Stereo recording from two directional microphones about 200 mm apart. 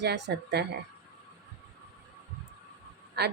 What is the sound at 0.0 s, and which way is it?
Speech, 55° right (ahead or behind).